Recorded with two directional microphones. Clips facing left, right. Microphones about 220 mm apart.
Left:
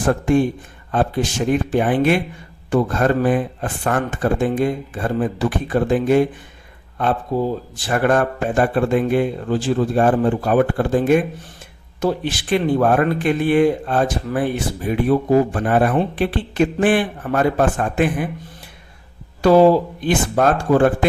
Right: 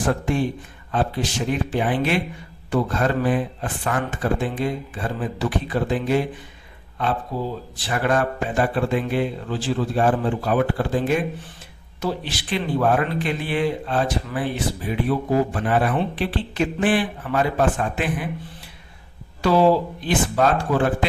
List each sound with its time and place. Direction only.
0.0 s speech: 50° left (ahead or behind)
7.3 s speech: 50° left (ahead or behind)
19.4 s speech: 50° left (ahead or behind)